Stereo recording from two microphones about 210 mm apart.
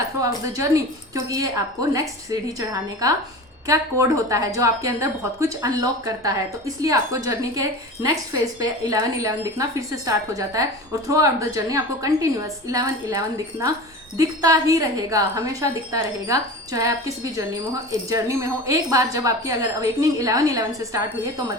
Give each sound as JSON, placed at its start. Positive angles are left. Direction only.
{"t": 0.2, "sound": "a woman's voice", "side_deg": -15}
{"t": 18.1, "sound": "a woman's voice", "side_deg": -15}